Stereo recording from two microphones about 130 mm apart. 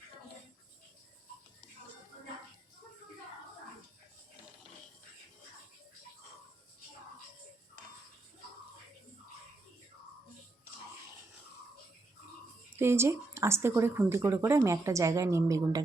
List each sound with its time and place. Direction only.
12.8 s speech: 20° right (ahead or behind)